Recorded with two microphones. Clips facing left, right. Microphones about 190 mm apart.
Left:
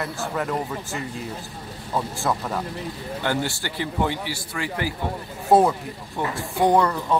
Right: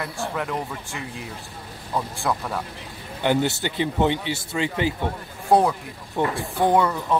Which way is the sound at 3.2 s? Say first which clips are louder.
Right 5 dB; 20° right (ahead or behind).